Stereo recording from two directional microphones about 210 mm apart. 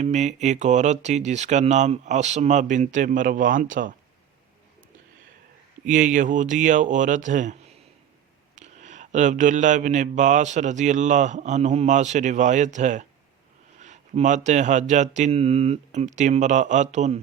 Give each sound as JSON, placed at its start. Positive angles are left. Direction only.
{"t": 0.0, "sound": "mantra", "side_deg": -35}
{"t": 5.8, "sound": "mantra", "side_deg": -35}
{"t": 8.5, "sound": "mantra", "side_deg": -35}